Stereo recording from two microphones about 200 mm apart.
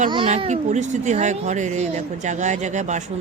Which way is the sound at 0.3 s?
35° right (ahead or behind).